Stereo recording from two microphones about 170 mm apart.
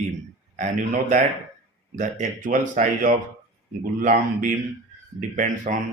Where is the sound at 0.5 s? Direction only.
45° right (ahead or behind).